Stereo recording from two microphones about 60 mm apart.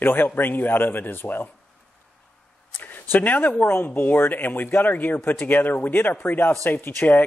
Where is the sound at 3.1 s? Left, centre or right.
Left.